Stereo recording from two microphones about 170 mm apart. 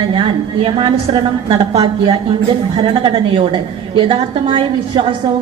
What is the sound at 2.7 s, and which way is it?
A woman's voice, 30° right (ahead or behind).